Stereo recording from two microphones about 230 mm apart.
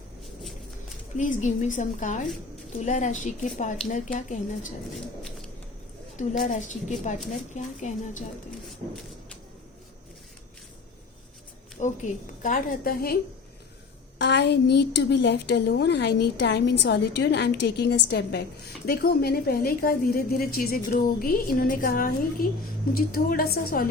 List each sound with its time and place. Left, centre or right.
1.1 s a woman's voice: left
6.1 s a woman's voice: left
11.8 s a woman's voice: left
14.2 s a woman's voice: left